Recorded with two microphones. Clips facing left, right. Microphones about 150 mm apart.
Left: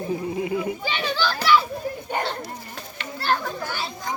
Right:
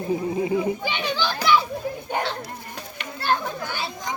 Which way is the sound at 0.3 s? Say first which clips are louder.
Right 3 dB; 25° right (ahead or behind).